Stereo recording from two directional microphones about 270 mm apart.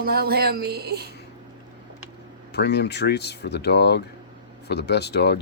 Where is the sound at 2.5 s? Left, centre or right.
Left.